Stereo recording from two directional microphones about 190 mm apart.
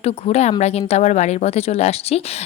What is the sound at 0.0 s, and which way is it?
Speech, 35° left (ahead or behind).